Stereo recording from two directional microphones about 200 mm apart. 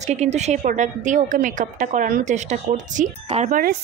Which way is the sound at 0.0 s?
35° right (ahead or behind).